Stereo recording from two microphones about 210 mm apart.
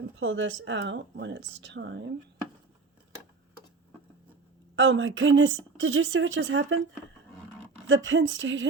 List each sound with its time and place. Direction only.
0.2 s speech: 70° right (ahead or behind)
4.8 s a woman's voice: 65° right (ahead or behind)
7.9 s speech: 65° right (ahead or behind)